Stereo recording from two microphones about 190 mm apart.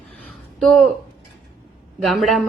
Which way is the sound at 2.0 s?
Centre (ahead or behind).